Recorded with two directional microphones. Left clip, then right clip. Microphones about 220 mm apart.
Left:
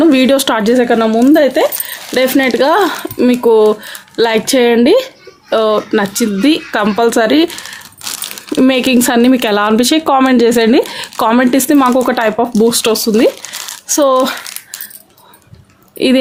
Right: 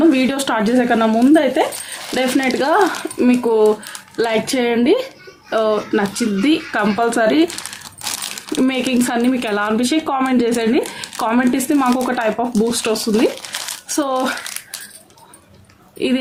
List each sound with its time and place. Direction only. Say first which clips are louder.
0.0 s speech: left 6 dB; 45° left (ahead or behind)
8.5 s speech: left 7 dB; 45° left (ahead or behind)